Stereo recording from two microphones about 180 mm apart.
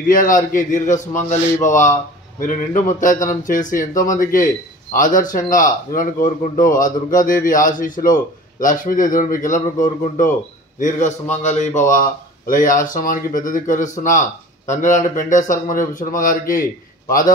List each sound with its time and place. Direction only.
0.1 s a man's voice: 50° left (ahead or behind)